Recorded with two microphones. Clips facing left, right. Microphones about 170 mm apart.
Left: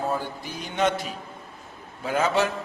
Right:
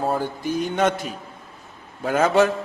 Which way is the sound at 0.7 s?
50° right (ahead or behind).